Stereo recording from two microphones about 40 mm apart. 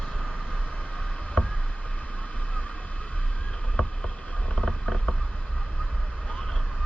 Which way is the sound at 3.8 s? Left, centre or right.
Left.